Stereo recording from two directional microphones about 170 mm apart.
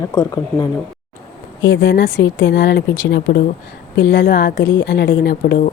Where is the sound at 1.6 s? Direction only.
90° left.